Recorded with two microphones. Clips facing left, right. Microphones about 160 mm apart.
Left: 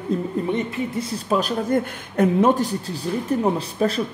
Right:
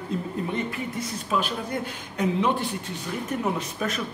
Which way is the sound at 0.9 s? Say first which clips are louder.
Left 6 dB; 40° left (ahead or behind).